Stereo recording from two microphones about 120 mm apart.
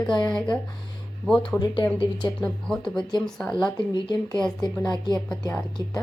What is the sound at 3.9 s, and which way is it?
Speech, 35° left (ahead or behind).